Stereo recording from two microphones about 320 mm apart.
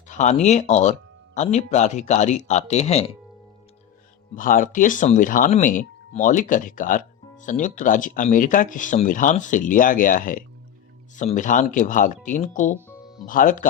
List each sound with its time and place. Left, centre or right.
0.1 s speech: left
4.4 s speech: left